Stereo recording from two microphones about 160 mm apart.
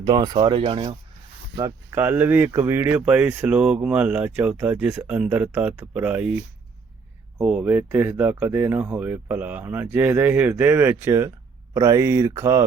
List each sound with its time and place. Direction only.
0.0 s speech: 25° right (ahead or behind)
1.5 s speech: 25° right (ahead or behind)
2.0 s speech: 10° right (ahead or behind)